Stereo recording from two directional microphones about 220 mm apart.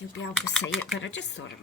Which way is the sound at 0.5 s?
Centre (ahead or behind).